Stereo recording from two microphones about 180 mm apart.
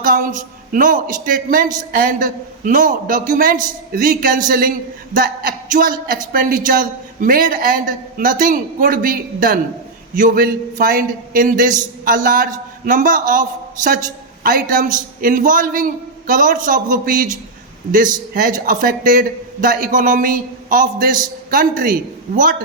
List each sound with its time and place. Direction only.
0.0 s a man's voice: 50° right (ahead or behind)